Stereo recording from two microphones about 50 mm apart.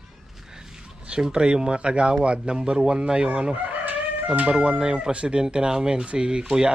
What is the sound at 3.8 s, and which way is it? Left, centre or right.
A man's voice, right.